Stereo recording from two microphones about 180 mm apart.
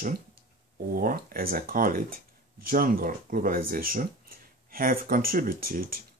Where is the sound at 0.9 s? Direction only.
55° right (ahead or behind).